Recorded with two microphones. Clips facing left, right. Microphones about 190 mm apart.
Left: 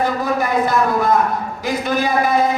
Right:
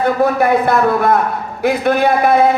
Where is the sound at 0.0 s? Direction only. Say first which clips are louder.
Right 6 dB; 60° right (ahead or behind).